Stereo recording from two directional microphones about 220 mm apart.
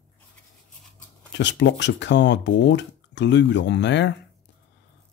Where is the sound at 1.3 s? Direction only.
55° left (ahead or behind).